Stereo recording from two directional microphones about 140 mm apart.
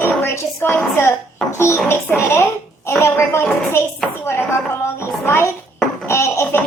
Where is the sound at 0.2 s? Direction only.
15° left (ahead or behind).